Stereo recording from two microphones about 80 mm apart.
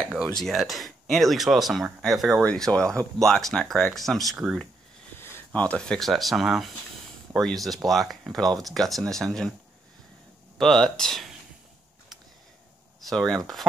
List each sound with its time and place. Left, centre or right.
0.3 s speech: centre
2.4 s speech: centre
5.5 s speech: centre
10.6 s speech: centre
13.1 s speech: centre